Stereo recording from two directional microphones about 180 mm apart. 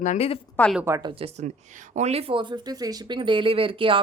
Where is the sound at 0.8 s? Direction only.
15° right (ahead or behind).